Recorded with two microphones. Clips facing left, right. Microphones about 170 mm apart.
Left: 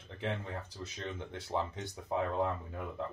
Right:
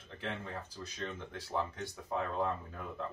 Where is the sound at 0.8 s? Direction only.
20° left (ahead or behind).